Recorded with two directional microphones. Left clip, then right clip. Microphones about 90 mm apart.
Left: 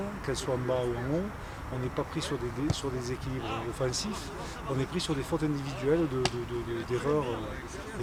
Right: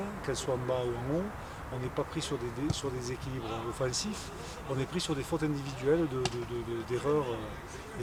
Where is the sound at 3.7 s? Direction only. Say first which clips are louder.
Left 2 dB; centre (ahead or behind).